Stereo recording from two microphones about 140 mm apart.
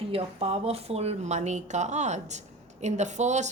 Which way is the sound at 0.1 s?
45° right (ahead or behind).